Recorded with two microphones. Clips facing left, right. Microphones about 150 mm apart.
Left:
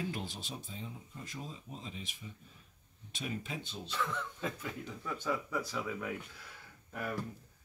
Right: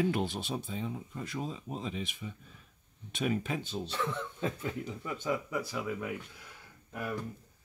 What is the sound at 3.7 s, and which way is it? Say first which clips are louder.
Speech: right 3 dB; 35° right (ahead or behind).